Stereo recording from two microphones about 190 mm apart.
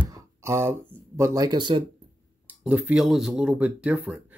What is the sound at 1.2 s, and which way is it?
Speech, 20° right (ahead or behind).